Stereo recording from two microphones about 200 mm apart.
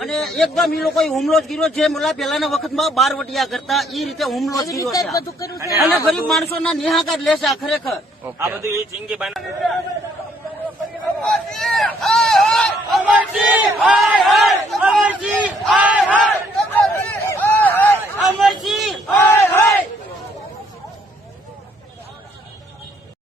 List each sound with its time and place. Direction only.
0.0 s a sound: centre (ahead or behind)
0.9 s a man's voice: centre (ahead or behind)
4.4 s speech: 15° left (ahead or behind)
6.1 s a man's voice: centre (ahead or behind)
8.4 s speech: 15° right (ahead or behind)
9.0 s speech: centre (ahead or behind)
11.2 s a sound: centre (ahead or behind)
15.4 s battle cry: 5° right (ahead or behind)
16.7 s a sound: 10° left (ahead or behind)
19.1 s battle cry: 10° left (ahead or behind)